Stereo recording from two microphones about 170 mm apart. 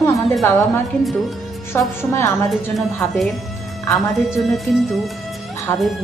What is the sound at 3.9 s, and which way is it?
Speech, centre (ahead or behind).